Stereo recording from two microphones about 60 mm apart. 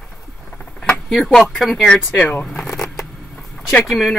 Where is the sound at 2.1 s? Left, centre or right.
Left.